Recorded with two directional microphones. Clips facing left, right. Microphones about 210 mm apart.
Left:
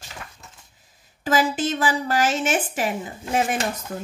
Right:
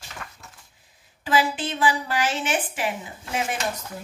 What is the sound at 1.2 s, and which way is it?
A woman's voice, 45° left (ahead or behind).